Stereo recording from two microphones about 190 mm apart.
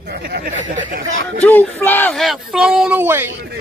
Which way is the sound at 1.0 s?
80° right.